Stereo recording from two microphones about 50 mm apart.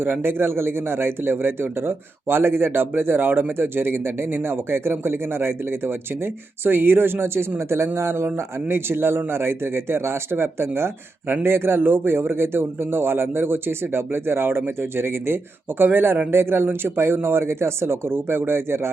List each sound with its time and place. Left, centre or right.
0.0 s speech: right